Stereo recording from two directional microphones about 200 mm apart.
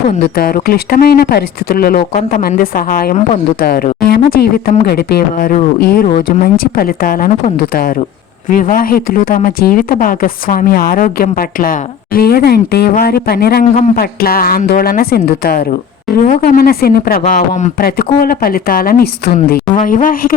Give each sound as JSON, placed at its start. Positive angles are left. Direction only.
{"t": 0.2, "sound": "speech", "side_deg": 50}
{"t": 6.1, "sound": "speech", "side_deg": 35}